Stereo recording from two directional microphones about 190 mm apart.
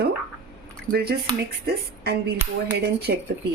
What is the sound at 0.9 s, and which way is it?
Speech, 55° right (ahead or behind).